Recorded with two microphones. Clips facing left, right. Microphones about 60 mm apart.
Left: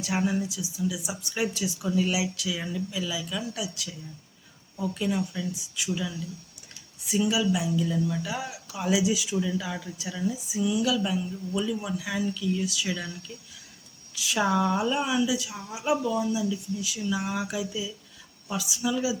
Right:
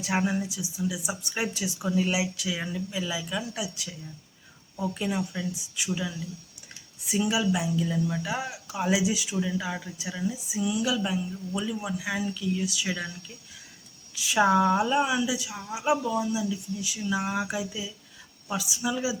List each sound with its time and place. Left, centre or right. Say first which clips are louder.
0.0 s speech: even; right
4.8 s speech: left 1 dB; centre
7.4 s speech: left 1 dB; right
14.3 s speech: right 3 dB; centre